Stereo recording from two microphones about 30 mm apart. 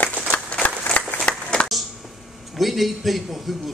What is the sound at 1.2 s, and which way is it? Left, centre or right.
Applause, left.